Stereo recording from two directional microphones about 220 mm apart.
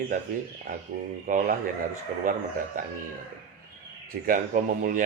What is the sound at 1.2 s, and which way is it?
Speech, 35° right (ahead or behind).